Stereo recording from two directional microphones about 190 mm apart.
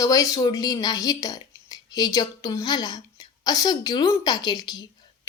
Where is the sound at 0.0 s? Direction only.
20° left (ahead or behind).